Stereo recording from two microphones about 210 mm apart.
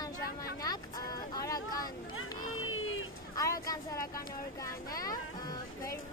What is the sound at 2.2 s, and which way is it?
Vehicle, 75° left (ahead or behind).